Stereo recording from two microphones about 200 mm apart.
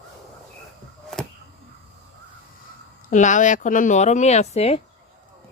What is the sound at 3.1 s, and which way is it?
Speech, 40° left (ahead or behind).